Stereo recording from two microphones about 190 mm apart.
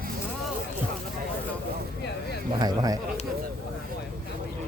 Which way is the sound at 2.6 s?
20° right (ahead or behind).